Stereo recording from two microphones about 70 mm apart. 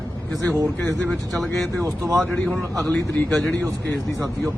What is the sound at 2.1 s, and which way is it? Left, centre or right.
A man's voice, centre.